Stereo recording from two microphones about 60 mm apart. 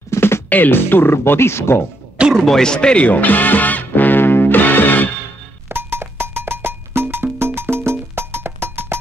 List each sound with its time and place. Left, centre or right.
0.1 s music: left
0.5 s speech: left
2.4 s music: centre; by 5.1 s left
5.7 s music: right